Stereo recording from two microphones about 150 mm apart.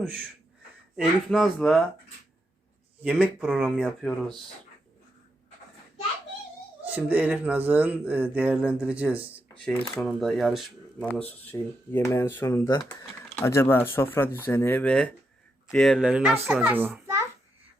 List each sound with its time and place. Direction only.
0.9 s speech: centre (ahead or behind)
3.0 s speech: 5° right (ahead or behind)
6.8 s speech: 10° right (ahead or behind)
9.6 s speech: 5° left (ahead or behind)
11.1 s speech: 10° left (ahead or behind)
16.0 s speech: 5° right (ahead or behind)